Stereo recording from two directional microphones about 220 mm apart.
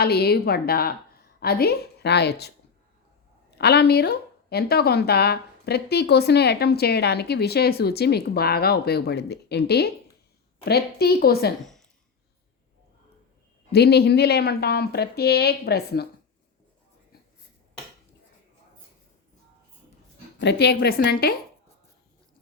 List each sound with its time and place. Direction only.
0.0 s a woman's voice: 45° left (ahead or behind)
3.6 s a woman's voice: 50° left (ahead or behind)
11.6 s a sound: centre (ahead or behind)
13.7 s a woman's voice: 45° left (ahead or behind)
20.4 s a woman's voice: 50° left (ahead or behind)